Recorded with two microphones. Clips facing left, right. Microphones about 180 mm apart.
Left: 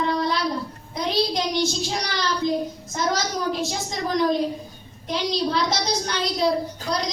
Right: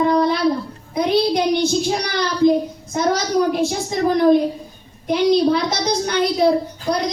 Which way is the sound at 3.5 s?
55° right (ahead or behind).